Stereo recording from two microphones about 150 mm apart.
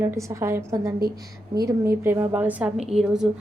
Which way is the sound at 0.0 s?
20° right (ahead or behind).